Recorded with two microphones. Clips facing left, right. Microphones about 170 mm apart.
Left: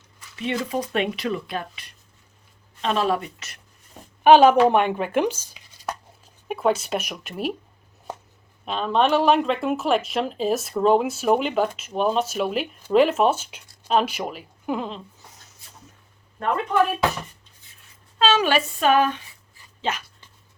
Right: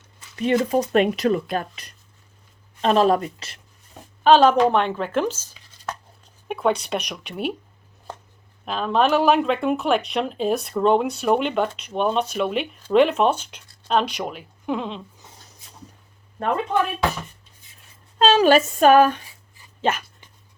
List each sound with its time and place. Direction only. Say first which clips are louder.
0.3 s speech: right 6 dB; 45° right (ahead or behind)
4.2 s a woman's voice: left 1 dB; 15° left (ahead or behind)
6.5 s speech: even; centre (ahead or behind)
8.6 s speech: right 1 dB; centre (ahead or behind)
18.2 s speech: right 5 dB; 40° right (ahead or behind)